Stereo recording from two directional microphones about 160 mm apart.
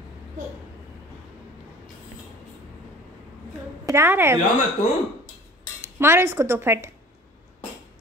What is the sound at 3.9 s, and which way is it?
Speech, 15° right (ahead or behind).